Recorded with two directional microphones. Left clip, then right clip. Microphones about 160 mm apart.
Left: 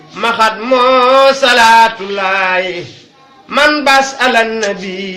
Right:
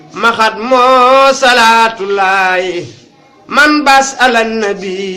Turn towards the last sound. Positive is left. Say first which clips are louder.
# right 2 dB
turn(degrees=-10)  # may be behind; listen again after turning